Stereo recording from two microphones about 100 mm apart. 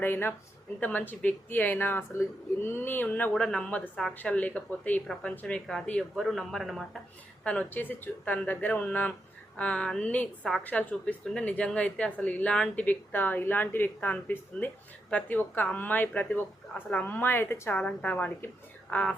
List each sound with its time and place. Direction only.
0.0 s speech: 20° left (ahead or behind); by 7.0 s centre (ahead or behind)
7.4 s speech: 15° left (ahead or behind)